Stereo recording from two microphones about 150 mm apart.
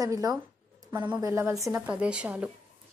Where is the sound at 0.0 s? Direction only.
25° right (ahead or behind).